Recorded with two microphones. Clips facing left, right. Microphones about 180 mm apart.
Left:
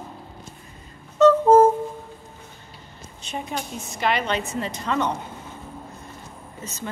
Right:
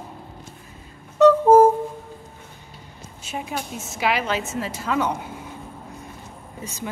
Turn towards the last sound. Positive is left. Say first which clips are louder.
# right 2 dB
turn(degrees=-10)  # may be behind; listen again after turning